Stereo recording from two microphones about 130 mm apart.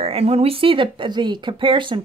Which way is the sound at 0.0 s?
50° right (ahead or behind).